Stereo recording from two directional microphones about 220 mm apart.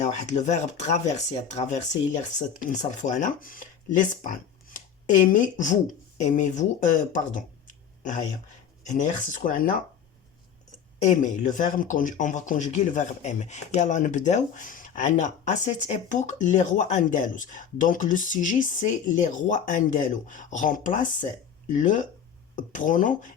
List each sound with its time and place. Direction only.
0.0 s speech: 35° left (ahead or behind)
8.9 s speech: 35° left (ahead or behind)
11.0 s speech: 35° left (ahead or behind)